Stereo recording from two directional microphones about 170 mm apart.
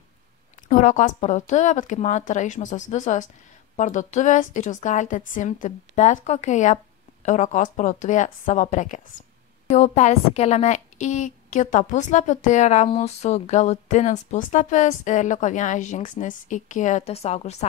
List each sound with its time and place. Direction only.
0.7 s a woman's voice: 50° left (ahead or behind)